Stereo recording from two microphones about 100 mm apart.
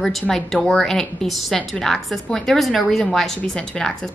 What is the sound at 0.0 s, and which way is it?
A woman's voice, 5° left (ahead or behind).